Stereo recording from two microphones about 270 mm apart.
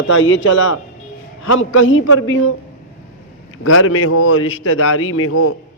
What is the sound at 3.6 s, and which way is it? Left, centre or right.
A man's voice, left.